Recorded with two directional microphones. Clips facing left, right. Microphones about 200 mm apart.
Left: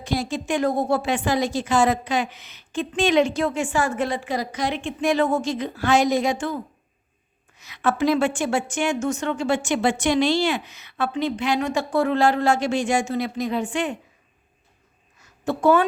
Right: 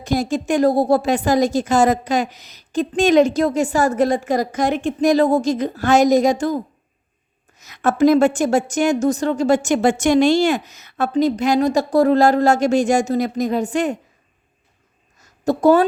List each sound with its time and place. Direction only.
0.0 s a woman's voice: 45° right (ahead or behind)
15.2 s a woman's voice: 40° right (ahead or behind)